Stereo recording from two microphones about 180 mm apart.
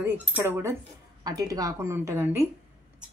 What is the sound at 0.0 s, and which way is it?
A woman's voice, 10° right (ahead or behind).